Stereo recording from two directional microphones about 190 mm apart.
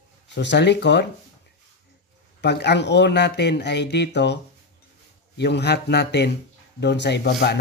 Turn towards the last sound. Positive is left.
turn(degrees=60)  # may be behind; listen again after turning